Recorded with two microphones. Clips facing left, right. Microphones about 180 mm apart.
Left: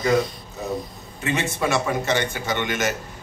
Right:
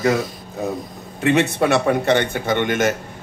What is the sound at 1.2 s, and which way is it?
A man's voice, 60° right (ahead or behind).